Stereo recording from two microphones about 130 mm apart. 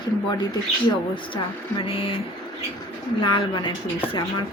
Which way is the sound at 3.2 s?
35° left (ahead or behind).